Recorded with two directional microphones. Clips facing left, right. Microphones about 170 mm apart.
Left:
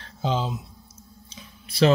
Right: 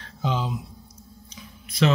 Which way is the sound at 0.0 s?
30° left (ahead or behind).